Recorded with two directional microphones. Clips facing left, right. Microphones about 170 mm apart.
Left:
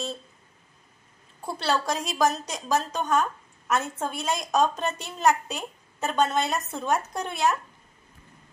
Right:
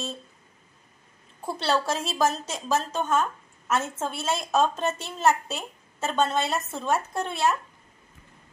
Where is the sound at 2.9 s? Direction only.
Centre (ahead or behind).